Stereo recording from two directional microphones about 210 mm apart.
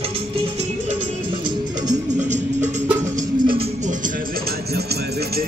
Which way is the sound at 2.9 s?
15° right (ahead or behind).